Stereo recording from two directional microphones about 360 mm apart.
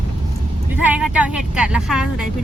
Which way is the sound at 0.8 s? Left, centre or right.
Centre.